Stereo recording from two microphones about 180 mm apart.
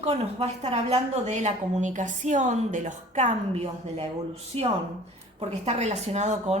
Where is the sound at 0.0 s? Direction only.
35° right (ahead or behind).